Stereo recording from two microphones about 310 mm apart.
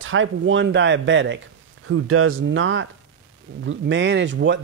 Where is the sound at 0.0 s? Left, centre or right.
Right.